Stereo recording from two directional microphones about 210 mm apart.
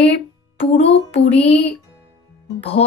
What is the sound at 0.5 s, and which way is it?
Speech, 30° left (ahead or behind).